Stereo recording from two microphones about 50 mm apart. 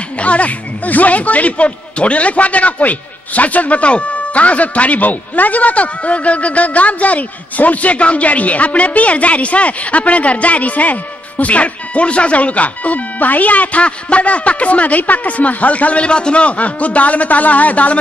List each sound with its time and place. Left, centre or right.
0.2 s speech: left